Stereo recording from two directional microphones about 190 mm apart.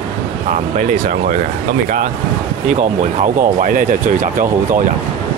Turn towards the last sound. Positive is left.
turn(degrees=-45)  # may be behind; listen again after turning